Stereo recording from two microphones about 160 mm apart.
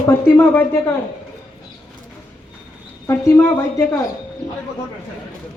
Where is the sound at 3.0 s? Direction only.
20° left (ahead or behind).